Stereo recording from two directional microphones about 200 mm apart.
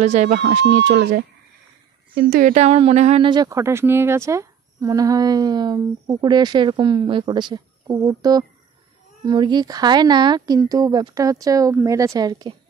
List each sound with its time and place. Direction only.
0.0 s speech: 35° right (ahead or behind)
0.7 s speech: 60° right (ahead or behind); by 12.5 s 20° right (ahead or behind)